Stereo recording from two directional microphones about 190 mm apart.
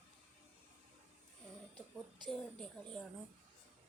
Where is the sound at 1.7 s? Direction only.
25° right (ahead or behind).